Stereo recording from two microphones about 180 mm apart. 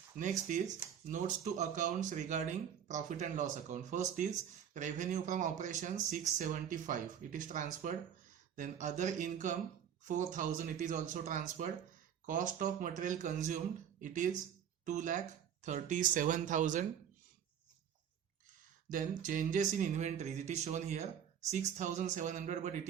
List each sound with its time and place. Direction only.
0.2 s speech: 45° right (ahead or behind)
18.9 s speech: 45° right (ahead or behind)